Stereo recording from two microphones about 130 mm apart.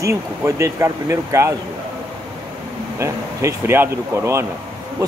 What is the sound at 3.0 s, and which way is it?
Speech, 20° right (ahead or behind).